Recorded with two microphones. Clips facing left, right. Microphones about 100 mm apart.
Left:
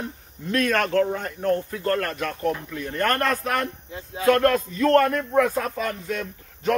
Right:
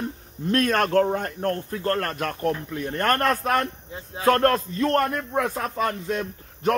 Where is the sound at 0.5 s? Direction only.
40° right (ahead or behind).